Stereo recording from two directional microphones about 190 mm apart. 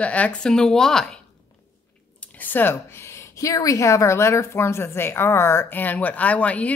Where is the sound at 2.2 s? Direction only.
10° left (ahead or behind).